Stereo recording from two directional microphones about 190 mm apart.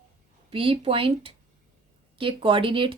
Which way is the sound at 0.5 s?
30° right (ahead or behind).